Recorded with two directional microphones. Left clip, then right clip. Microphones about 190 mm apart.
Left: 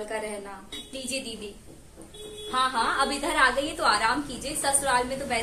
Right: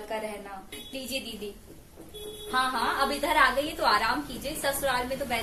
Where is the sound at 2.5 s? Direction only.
5° left (ahead or behind).